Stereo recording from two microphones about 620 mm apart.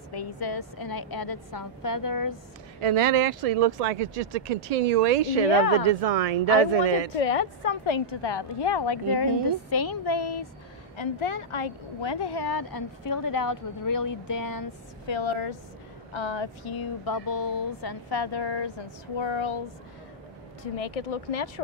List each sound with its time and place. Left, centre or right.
0.5 s a woman's voice: left
2.8 s speech: right
7.2 s a woman's voice: left
11.0 s a woman's voice: left
15.0 s a woman's voice: left
20.7 s speech: left